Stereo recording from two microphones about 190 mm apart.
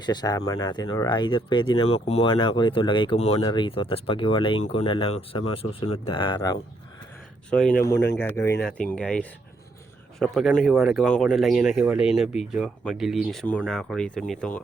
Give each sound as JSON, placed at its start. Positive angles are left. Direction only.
{"t": 0.0, "sound": "speech", "side_deg": 20}
{"t": 7.5, "sound": "speech", "side_deg": 5}